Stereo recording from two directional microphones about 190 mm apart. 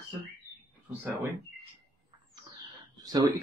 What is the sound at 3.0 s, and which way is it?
Speech, 20° right (ahead or behind).